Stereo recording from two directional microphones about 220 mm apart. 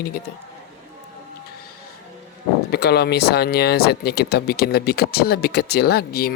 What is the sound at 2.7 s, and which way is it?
Speech, 50° left (ahead or behind).